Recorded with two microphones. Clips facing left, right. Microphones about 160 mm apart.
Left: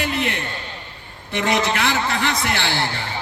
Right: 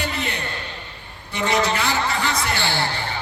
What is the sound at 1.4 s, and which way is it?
A man's voice, 60° left (ahead or behind).